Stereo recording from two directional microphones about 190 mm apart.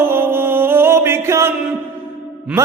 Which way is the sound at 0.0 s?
10° right (ahead or behind).